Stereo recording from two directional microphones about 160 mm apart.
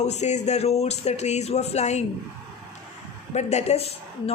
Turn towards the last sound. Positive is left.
turn(degrees=40)  # may be behind; listen again after turning